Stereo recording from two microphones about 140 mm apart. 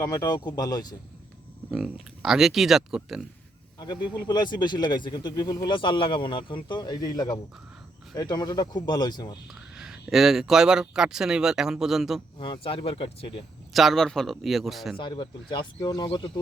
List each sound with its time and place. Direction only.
0.0 s speech: 25° left (ahead or behind)
1.7 s speech: centre (ahead or behind)
3.8 s speech: 30° left (ahead or behind)
9.5 s speech: centre (ahead or behind)
12.4 s speech: 40° left (ahead or behind)
13.7 s speech: centre (ahead or behind)
14.9 s speech: 35° left (ahead or behind)